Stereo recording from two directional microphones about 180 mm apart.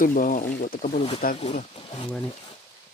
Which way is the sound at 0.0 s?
50° left (ahead or behind).